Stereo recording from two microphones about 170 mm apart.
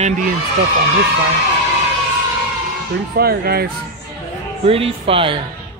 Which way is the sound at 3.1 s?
65° right (ahead or behind).